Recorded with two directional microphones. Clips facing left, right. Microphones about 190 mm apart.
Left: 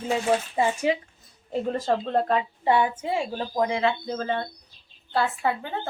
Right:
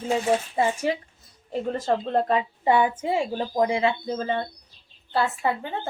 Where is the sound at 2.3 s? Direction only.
15° right (ahead or behind).